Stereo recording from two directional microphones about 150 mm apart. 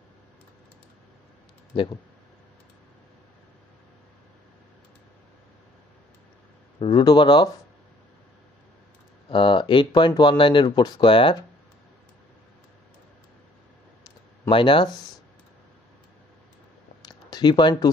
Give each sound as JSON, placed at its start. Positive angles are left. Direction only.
{"t": 6.8, "sound": "speech", "side_deg": 30}
{"t": 9.3, "sound": "speech", "side_deg": 35}
{"t": 14.5, "sound": "speech", "side_deg": 35}
{"t": 17.0, "sound": "a sound", "side_deg": 30}